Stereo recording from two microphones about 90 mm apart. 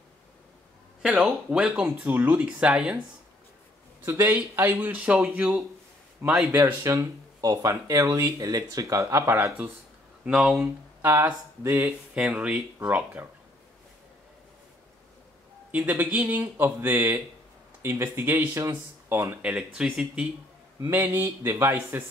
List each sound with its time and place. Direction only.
1.0 s speech: 10° right (ahead or behind)
2.4 s speech: 10° right (ahead or behind)
4.0 s speech: 25° right (ahead or behind)
6.6 s speech: 30° right (ahead or behind)
10.2 s speech: 15° right (ahead or behind)
15.7 s speech: 20° right (ahead or behind)
19.5 s speech: 10° right (ahead or behind)
20.9 s speech: 20° right (ahead or behind)